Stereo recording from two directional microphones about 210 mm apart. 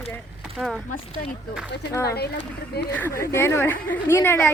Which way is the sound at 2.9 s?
10° left (ahead or behind).